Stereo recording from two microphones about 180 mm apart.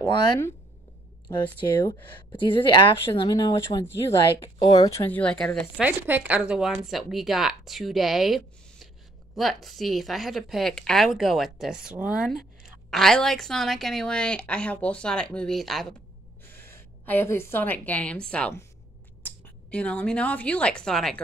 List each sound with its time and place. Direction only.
0.0 s speech: 25° left (ahead or behind)
1.9 s speech: 25° left (ahead or behind)
4.6 s speech: 20° left (ahead or behind); by 5.9 s 5° left (ahead or behind)
5.9 s a woman's voice: 10° right (ahead or behind)
16.4 s a woman's voice: 10° left (ahead or behind)